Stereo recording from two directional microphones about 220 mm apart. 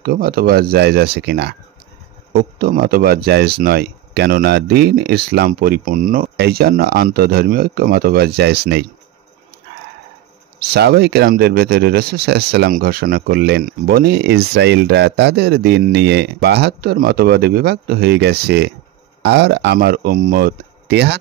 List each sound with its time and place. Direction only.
0.0 s speech: 45° right (ahead or behind)
10.7 s speech: 45° right (ahead or behind)